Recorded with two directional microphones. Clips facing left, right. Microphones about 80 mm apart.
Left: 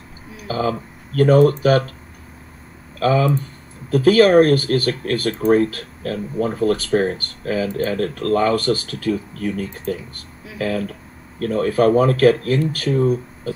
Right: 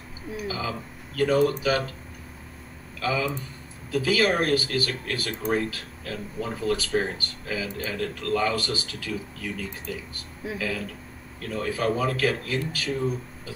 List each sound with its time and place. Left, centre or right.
0.5 s speech: left
3.0 s speech: left